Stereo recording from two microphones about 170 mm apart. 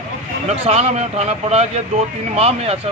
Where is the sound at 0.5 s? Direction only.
40° right (ahead or behind).